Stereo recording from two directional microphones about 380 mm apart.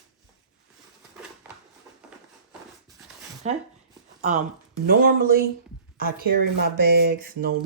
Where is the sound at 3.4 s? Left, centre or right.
Centre.